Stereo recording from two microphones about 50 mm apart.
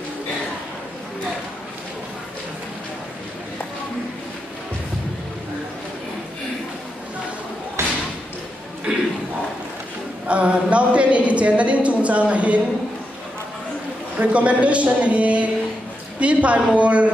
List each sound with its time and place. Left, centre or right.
7.8 s slam: right
8.9 s a sound: centre
10.2 s a woman's voice: right
14.1 s a woman's voice: right